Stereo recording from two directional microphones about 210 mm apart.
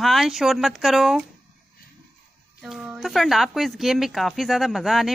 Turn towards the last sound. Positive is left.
turn(degrees=0)  # may be behind; listen again after turning